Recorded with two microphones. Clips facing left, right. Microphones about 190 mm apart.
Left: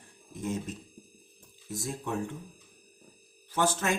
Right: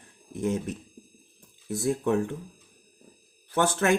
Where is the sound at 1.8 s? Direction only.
65° right (ahead or behind).